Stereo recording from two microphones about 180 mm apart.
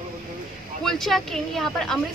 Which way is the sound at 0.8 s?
Centre (ahead or behind).